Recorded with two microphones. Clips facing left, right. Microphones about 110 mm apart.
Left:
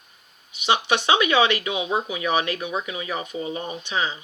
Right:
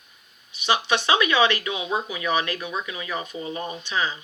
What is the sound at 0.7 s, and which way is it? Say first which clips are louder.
Speech: left 1 dB; 25° left (ahead or behind).